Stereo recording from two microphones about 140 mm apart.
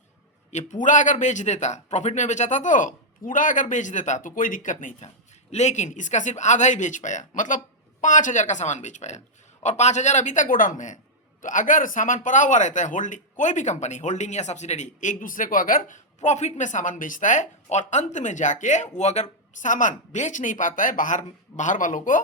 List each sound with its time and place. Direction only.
0.5 s speech: 65° left (ahead or behind); by 16.0 s 85° left
16.2 s speech: 55° left (ahead or behind)